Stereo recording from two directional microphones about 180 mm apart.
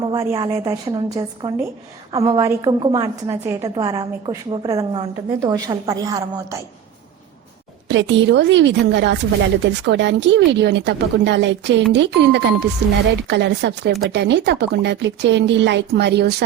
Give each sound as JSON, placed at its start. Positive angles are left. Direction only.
{"t": 0.0, "sound": "a woman's voice", "side_deg": -20}
{"t": 7.9, "sound": "a woman's voice", "side_deg": -80}